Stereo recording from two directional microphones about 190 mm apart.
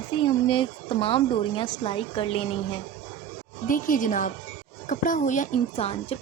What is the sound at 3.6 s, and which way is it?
Speech, 45° left (ahead or behind).